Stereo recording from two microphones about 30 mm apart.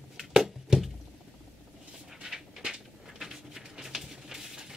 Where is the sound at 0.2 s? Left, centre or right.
Centre.